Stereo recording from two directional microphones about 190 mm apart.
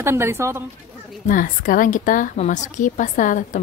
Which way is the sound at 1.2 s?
45° left (ahead or behind).